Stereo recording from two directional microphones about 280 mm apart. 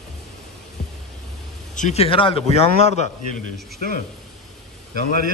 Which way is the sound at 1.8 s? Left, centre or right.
Left.